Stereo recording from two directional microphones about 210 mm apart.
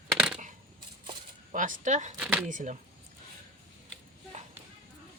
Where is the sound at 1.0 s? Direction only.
35° right (ahead or behind).